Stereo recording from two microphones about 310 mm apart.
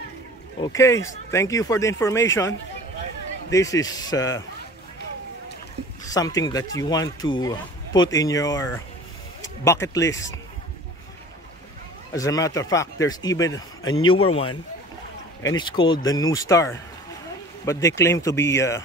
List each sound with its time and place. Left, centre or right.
0.6 s speech: centre
6.0 s speech: centre
12.1 s speech: centre
14.1 s speech: left
15.5 s speech: centre